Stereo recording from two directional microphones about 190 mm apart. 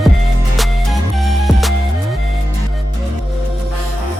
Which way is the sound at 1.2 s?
Centre (ahead or behind).